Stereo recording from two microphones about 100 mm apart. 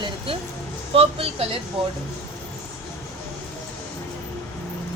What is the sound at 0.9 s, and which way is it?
Speech, 75° right (ahead or behind).